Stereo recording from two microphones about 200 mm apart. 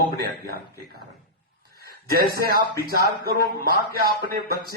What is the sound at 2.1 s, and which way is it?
Speech, 50° right (ahead or behind).